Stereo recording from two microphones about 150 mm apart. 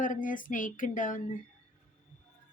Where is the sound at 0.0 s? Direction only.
60° left (ahead or behind).